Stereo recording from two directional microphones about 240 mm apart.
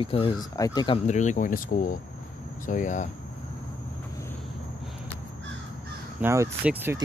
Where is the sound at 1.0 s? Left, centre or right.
Left.